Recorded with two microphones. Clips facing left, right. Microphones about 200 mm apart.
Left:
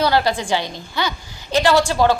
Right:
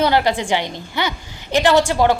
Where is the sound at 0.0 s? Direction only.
20° right (ahead or behind).